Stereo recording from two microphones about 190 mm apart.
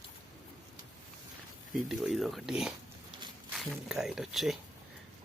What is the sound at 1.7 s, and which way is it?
Speech, centre (ahead or behind).